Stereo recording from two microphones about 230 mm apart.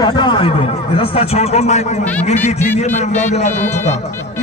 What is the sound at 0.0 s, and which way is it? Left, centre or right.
A man's voice, centre.